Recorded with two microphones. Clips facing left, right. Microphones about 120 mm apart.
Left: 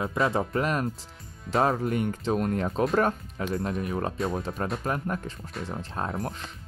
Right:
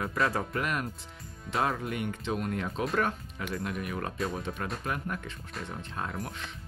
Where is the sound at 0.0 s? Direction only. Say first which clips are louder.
Left 4 dB; 25° left (ahead or behind).